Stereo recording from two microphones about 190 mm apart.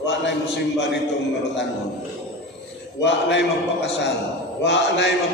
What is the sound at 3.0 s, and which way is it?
Speech, 65° left (ahead or behind).